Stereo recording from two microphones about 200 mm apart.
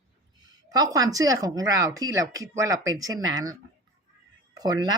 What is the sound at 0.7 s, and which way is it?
Speech, 20° right (ahead or behind).